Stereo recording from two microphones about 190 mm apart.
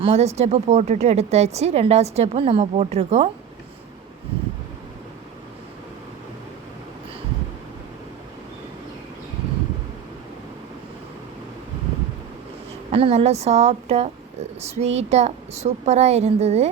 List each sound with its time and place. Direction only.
0.0 s speech: 35° right (ahead or behind)
12.9 s speech: 30° right (ahead or behind)